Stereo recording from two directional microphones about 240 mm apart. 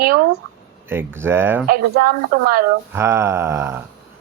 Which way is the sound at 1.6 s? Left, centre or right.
Right.